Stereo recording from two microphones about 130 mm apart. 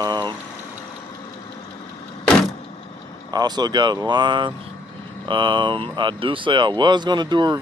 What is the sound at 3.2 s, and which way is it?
Speech, 30° right (ahead or behind).